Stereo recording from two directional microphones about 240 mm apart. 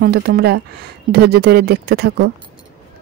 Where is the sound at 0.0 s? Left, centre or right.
Right.